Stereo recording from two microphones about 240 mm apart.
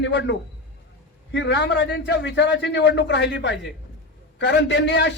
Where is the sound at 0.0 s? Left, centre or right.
Left.